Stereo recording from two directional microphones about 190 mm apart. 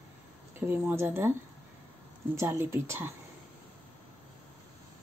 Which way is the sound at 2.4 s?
15° right (ahead or behind).